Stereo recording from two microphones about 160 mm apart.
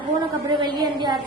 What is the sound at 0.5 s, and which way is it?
Speech, 30° right (ahead or behind).